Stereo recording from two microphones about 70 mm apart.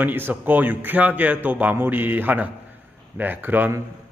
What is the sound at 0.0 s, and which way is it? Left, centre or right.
Speech, right.